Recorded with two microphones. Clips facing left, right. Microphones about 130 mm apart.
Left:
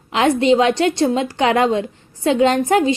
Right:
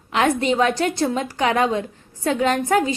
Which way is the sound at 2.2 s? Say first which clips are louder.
Left 5 dB; 25° left (ahead or behind).